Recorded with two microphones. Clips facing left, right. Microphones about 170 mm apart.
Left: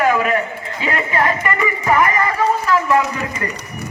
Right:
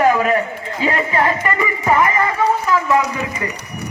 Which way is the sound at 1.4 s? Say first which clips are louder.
Even; 25° right (ahead or behind).